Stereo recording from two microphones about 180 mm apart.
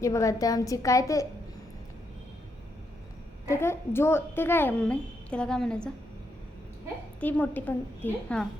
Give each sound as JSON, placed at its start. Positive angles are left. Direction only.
{"t": 0.0, "sound": "a woman's voice", "side_deg": 15}
{"t": 3.5, "sound": "a woman's voice", "side_deg": 15}
{"t": 7.2, "sound": "a woman's voice", "side_deg": 10}